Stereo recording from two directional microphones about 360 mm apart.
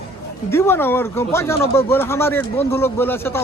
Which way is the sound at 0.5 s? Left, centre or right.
Centre.